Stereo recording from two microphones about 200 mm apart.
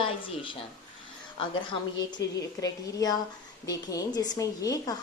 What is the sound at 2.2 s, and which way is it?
A woman's voice, 15° left (ahead or behind).